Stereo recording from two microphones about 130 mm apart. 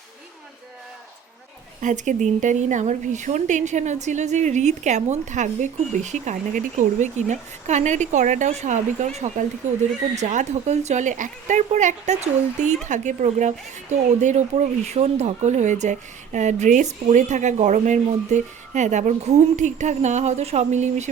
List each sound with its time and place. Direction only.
1.8 s a woman's voice: 75° right (ahead or behind)
8.4 s a woman's voice: 65° right (ahead or behind)